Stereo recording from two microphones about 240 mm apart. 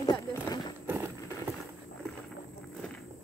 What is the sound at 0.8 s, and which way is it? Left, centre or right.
Clip-clop, centre.